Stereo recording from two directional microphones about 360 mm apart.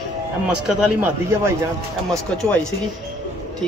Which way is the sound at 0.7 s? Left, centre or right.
Centre.